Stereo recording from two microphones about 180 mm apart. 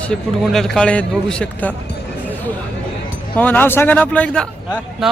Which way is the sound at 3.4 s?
10° left (ahead or behind).